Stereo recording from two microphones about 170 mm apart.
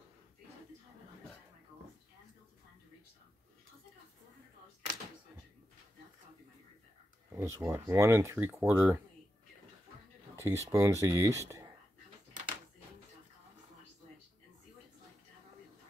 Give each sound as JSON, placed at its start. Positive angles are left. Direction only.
{"t": 7.3, "sound": "speech", "side_deg": -15}
{"t": 10.3, "sound": "speech", "side_deg": -15}